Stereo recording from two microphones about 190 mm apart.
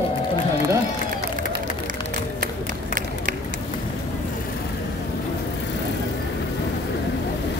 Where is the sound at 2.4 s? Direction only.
45° right (ahead or behind).